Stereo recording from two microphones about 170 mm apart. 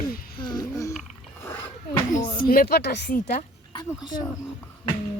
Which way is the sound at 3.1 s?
45° left (ahead or behind).